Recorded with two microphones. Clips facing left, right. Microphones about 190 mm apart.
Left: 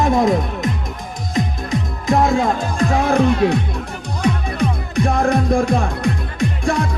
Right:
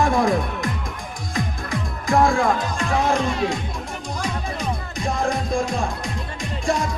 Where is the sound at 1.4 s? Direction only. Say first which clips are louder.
Left 6 dB; 20° left (ahead or behind).